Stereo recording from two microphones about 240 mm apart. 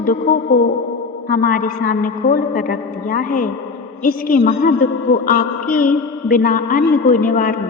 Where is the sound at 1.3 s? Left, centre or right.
Left.